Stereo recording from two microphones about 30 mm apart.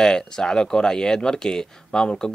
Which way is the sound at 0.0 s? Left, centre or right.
Left.